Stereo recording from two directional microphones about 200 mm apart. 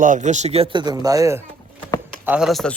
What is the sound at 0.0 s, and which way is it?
Speech, 40° right (ahead or behind).